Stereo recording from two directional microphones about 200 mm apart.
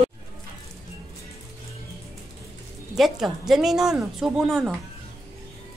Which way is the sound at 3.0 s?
Centre (ahead or behind).